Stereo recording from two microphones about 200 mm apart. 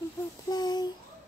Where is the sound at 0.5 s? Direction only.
20° left (ahead or behind).